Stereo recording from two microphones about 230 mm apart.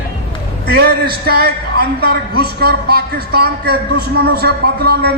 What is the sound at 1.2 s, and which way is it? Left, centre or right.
A man's voice, right.